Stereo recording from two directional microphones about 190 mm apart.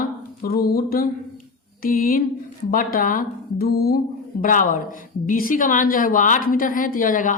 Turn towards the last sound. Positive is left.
turn(degrees=45)  # may be behind; listen again after turning